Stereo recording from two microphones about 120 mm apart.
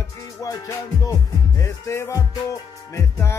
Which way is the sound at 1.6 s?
25° left (ahead or behind).